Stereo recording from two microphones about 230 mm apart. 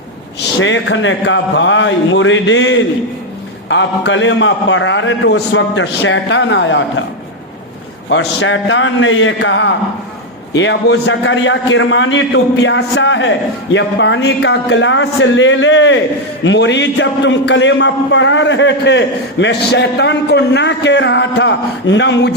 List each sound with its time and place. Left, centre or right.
0.6 s a man's voice: left
8.1 s a man's voice: left